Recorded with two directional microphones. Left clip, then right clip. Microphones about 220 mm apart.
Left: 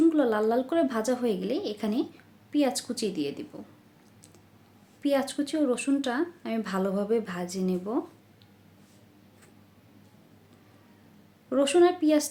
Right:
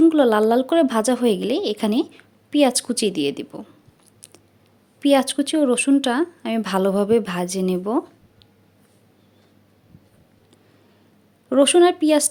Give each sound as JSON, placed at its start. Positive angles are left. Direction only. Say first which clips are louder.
{"t": 0.0, "sound": "a woman's voice", "louder": "right 8 dB", "side_deg": -40}
{"t": 4.9, "sound": "a woman's voice", "louder": "right 9 dB", "side_deg": -45}
{"t": 11.4, "sound": "a woman's voice", "louder": "right 7 dB", "side_deg": -40}